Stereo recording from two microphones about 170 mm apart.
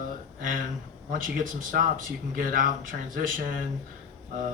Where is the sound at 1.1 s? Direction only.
55° right (ahead or behind).